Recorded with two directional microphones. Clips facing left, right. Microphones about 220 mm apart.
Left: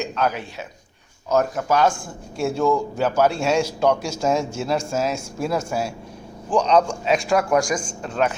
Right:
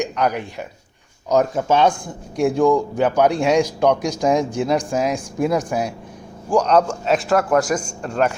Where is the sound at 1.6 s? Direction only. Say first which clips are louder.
Right 3 dB; 25° right (ahead or behind).